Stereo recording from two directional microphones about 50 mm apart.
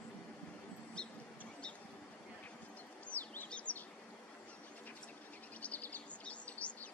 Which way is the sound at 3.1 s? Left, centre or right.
Left.